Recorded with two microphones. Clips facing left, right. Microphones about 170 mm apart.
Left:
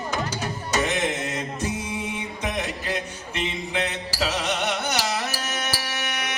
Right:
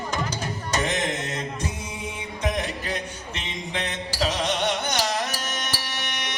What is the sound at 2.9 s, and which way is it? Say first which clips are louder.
Music: left 2 dB; 5° left (ahead or behind).